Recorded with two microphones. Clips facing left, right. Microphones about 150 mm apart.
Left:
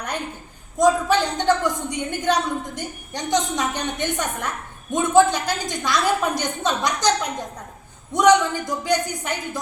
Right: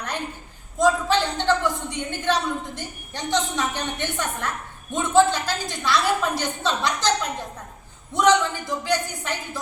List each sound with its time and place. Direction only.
0.8 s a woman's voice: 15° left (ahead or behind)